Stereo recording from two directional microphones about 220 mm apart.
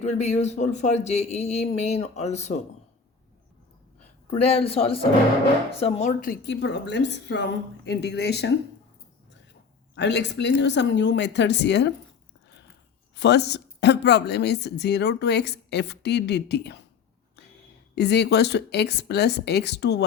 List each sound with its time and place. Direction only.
0.0 s a man's voice: 30° left (ahead or behind)
4.3 s a woman's voice: 25° left (ahead or behind); by 8.5 s 50° left (ahead or behind)
9.9 s a woman's voice: 50° left (ahead or behind)
13.1 s a woman's voice: 50° left (ahead or behind)
17.9 s a woman's voice: 50° left (ahead or behind)